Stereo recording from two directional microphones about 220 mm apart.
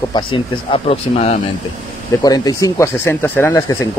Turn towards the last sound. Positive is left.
turn(degrees=10)  # may be behind; listen again after turning